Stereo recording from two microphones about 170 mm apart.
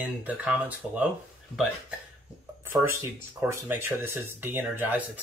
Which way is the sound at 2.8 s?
15° right (ahead or behind).